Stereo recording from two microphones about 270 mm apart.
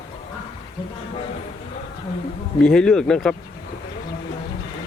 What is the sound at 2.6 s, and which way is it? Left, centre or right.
Speech, centre.